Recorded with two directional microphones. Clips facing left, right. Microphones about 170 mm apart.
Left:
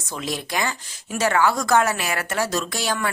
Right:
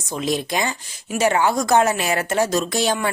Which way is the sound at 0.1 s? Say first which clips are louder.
Right 5 dB; 20° right (ahead or behind).